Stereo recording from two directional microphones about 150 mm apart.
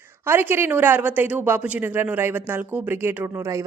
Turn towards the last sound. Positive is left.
turn(degrees=-20)  # may be behind; listen again after turning